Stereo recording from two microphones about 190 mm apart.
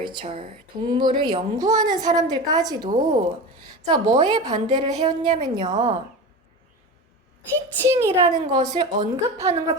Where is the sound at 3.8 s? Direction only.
30° right (ahead or behind).